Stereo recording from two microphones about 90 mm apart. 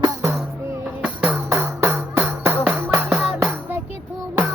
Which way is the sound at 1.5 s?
30° right (ahead or behind).